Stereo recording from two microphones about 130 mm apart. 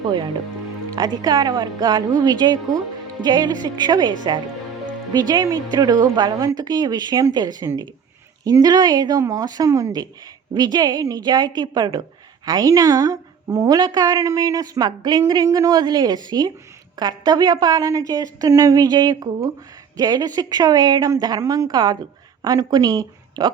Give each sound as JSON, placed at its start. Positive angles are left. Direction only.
{"t": 0.9, "sound": "a woman's voice", "side_deg": -35}